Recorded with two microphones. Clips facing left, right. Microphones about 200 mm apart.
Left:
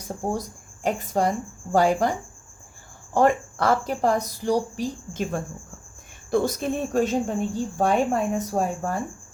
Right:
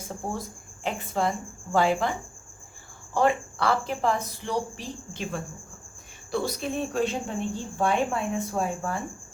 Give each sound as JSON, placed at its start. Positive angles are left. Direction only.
{"t": 0.3, "sound": "speech", "side_deg": 40}
{"t": 3.2, "sound": "a woman's voice", "side_deg": 45}